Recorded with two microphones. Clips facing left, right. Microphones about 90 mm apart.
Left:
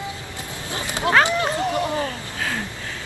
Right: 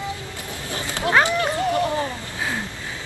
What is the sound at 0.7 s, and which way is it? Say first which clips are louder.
Cat: left 1 dB; 20° left (ahead or behind).